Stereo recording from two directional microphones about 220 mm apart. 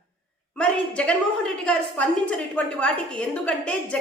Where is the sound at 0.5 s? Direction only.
5° left (ahead or behind).